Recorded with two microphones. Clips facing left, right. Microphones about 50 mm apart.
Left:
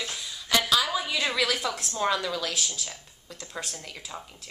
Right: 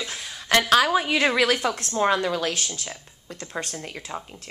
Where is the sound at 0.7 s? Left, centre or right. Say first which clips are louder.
Right 7 dB; right.